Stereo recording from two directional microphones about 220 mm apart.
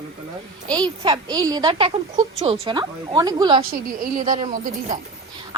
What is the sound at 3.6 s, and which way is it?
Speech, 40° right (ahead or behind).